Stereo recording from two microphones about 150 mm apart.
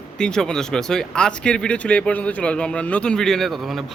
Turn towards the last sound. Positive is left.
turn(degrees=0)  # may be behind; listen again after turning